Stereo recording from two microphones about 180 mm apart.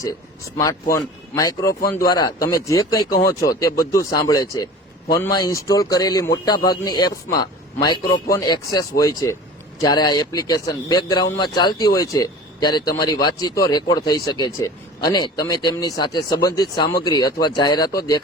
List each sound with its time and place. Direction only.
0.5 s speech: 20° left (ahead or behind)